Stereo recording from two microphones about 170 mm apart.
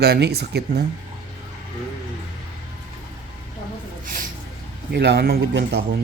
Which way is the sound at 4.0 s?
55° right (ahead or behind).